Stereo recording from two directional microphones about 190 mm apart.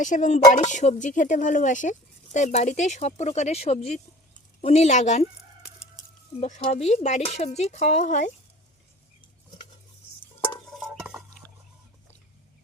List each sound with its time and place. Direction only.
0.0 s speech: 40° left (ahead or behind)
6.4 s speech: 35° left (ahead or behind)
10.4 s stir: centre (ahead or behind)